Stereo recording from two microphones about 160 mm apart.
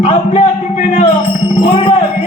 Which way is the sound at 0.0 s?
35° left (ahead or behind).